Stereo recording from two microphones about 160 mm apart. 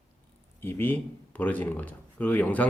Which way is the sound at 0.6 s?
15° left (ahead or behind).